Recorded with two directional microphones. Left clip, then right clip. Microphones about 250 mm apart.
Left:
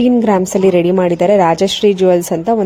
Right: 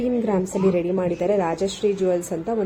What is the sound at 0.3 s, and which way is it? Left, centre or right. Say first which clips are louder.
A woman's voice: left 10 dB; left.